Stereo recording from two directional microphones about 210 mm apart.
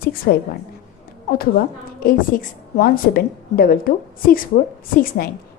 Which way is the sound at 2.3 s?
40° left (ahead or behind).